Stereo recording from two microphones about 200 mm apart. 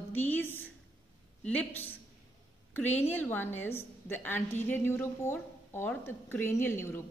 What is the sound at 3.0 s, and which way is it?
A woman's voice, 10° left (ahead or behind).